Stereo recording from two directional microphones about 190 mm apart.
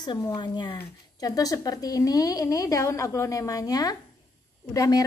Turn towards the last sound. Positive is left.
turn(degrees=20)  # may be behind; listen again after turning